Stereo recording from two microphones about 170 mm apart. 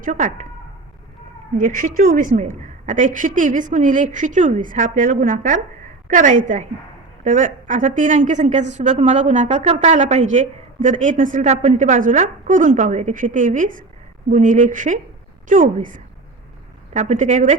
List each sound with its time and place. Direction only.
0.0 s a woman's voice: 50° right (ahead or behind)
1.5 s a woman's voice: 50° right (ahead or behind)